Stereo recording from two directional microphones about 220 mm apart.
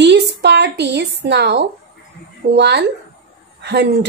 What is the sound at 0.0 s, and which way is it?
A woman's voice, 50° right (ahead or behind).